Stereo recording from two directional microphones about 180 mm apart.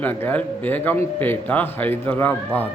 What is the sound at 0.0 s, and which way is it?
Speech, 10° left (ahead or behind).